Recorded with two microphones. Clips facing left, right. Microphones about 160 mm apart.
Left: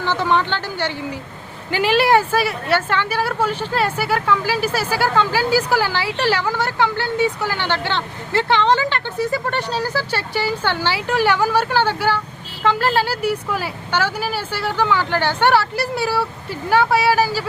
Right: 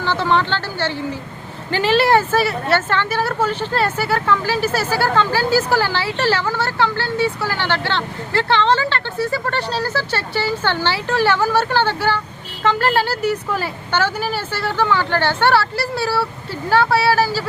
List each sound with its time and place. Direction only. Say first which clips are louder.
0.0 s speech: right 1 dB; 15° left (ahead or behind)